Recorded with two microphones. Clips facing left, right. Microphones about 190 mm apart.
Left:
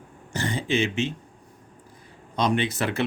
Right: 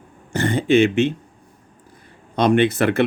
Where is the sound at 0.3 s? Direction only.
60° right (ahead or behind).